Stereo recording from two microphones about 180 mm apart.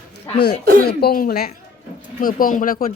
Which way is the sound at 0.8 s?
60° left (ahead or behind).